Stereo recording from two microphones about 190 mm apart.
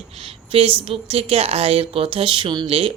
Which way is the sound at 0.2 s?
30° right (ahead or behind).